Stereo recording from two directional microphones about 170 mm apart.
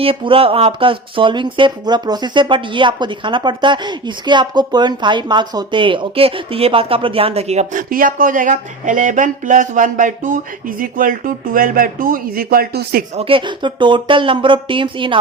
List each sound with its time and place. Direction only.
0.0 s speech: 35° right (ahead or behind); by 13.1 s 60° right (ahead or behind)
13.1 s speech: 30° right (ahead or behind)